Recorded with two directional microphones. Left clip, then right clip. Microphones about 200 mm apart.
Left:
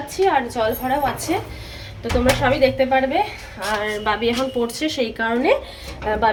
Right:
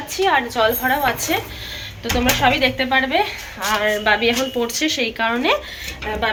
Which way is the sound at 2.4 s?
10° left (ahead or behind).